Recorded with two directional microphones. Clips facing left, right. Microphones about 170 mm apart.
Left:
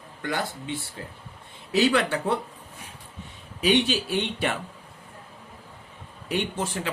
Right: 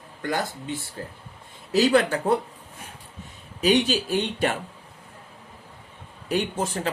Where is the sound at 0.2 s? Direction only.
45° right (ahead or behind).